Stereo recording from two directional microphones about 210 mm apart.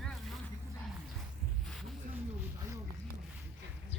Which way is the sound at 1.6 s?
Centre (ahead or behind).